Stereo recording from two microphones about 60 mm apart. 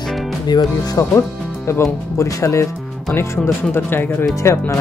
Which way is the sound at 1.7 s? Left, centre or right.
Left.